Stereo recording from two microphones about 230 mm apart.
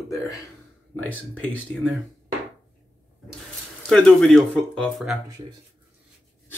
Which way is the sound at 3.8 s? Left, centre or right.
Centre.